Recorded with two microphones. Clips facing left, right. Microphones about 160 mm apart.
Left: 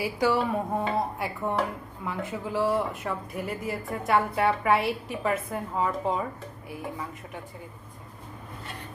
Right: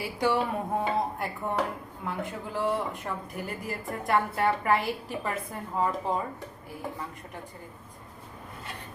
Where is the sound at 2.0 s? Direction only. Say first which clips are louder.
Left 2 dB; 5° left (ahead or behind).